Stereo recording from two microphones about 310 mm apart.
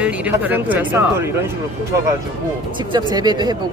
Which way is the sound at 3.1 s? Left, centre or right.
Centre.